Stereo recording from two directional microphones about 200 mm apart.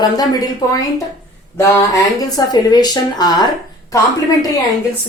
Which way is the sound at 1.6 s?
15° left (ahead or behind).